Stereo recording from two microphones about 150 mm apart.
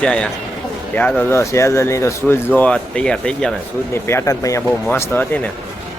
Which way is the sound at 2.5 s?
10° left (ahead or behind).